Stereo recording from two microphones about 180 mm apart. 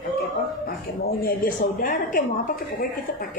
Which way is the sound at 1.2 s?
50° left (ahead or behind).